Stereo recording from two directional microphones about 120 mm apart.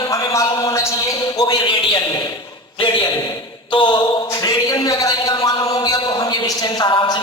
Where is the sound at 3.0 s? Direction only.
30° left (ahead or behind).